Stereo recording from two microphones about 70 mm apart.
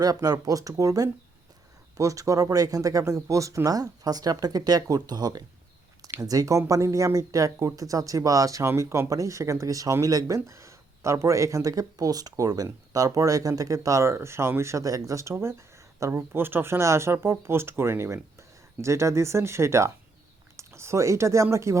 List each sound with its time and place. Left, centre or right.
0.0 s speech: right
6.1 s speech: right
20.6 s a sound: right
21.5 s speech: right